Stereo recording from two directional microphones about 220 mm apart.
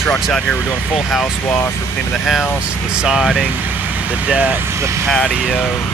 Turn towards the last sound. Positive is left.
turn(degrees=0)  # may be behind; listen again after turning